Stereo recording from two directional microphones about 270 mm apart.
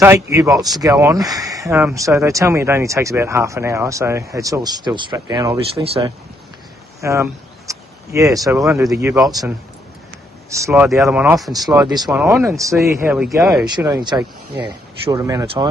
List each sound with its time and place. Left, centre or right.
0.0 s speech: centre
11.5 s speech: centre
13.7 s speech: centre